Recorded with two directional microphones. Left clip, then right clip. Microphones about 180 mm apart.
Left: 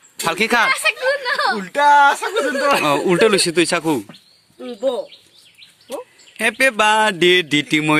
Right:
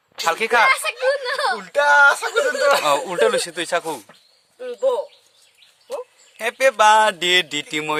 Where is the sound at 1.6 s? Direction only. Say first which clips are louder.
Left 1 dB; 50° right (ahead or behind).